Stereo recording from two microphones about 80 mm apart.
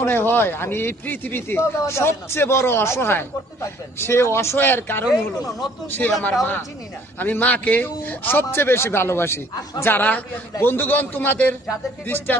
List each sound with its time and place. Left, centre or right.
0.0 s a man's voice: left
5.1 s a man's voice: left
5.9 s a man's voice: left